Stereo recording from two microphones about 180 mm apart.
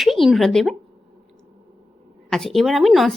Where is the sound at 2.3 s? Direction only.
Centre (ahead or behind).